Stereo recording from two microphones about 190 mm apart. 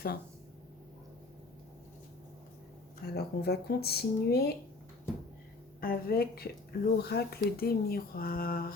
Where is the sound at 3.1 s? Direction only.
55° left (ahead or behind).